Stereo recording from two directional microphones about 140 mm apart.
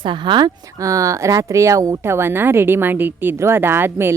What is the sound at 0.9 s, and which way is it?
A woman's voice, 25° right (ahead or behind).